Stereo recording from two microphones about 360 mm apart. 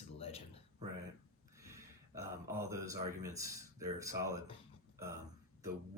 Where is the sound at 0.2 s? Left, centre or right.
Centre.